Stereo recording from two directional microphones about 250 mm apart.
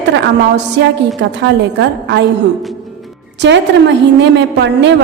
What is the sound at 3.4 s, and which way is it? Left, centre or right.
A woman's voice, right.